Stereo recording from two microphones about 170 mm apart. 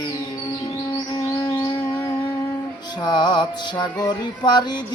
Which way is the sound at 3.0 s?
25° left (ahead or behind).